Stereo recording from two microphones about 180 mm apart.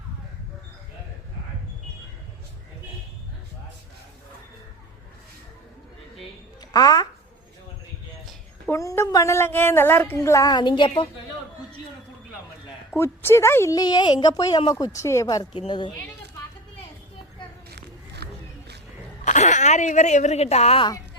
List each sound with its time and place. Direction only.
6.7 s speech: 20° left (ahead or behind)
8.7 s a woman's voice: 15° left (ahead or behind)
12.9 s a woman's voice: 15° left (ahead or behind)
17.7 s a sound: 70° right (ahead or behind)
19.2 s a woman's voice: 40° left (ahead or behind)